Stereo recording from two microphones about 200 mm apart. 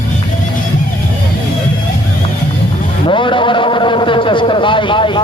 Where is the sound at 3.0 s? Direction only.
25° left (ahead or behind).